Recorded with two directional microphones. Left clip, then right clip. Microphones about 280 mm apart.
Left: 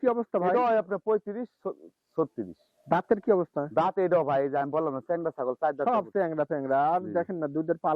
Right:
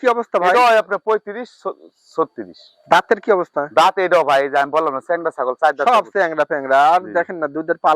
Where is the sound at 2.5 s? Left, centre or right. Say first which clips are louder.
Right 13 dB; centre.